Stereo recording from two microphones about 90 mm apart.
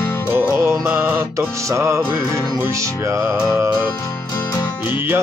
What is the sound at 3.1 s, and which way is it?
Music, 30° right (ahead or behind).